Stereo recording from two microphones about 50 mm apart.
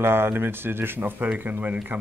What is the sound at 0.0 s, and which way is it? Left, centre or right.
Speech, right.